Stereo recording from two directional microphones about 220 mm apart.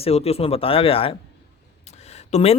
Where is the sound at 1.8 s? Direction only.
30° left (ahead or behind).